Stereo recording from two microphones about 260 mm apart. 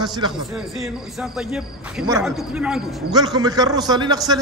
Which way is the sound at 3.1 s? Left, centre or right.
Centre.